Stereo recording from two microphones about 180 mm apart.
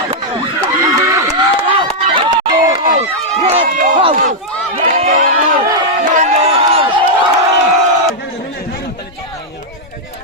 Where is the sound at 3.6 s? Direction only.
50° right (ahead or behind).